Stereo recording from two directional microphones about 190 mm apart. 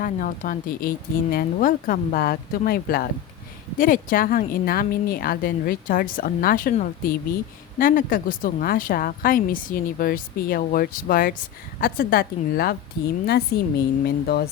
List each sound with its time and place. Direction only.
0.0 s speech: 45° left (ahead or behind)
13.5 s speech: 60° left (ahead or behind)